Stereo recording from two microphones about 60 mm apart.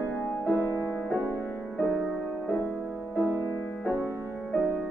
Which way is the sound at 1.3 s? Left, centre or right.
Left.